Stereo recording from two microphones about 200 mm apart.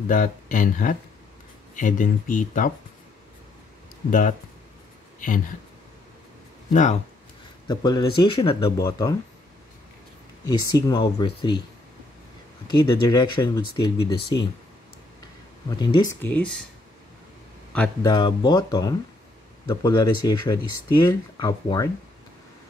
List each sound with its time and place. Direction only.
0.1 s speech: 40° left (ahead or behind)
4.1 s speech: 40° left (ahead or behind)
6.7 s speech: 35° left (ahead or behind)
7.6 s speech: 20° left (ahead or behind)
10.4 s speech: 20° left (ahead or behind)
12.6 s speech: 20° left (ahead or behind)
15.8 s speech: 20° left (ahead or behind)
18.0 s speech: 20° left (ahead or behind)